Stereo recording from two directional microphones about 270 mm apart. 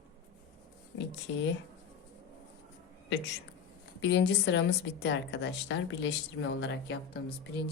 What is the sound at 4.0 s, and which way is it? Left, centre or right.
A woman's voice, left.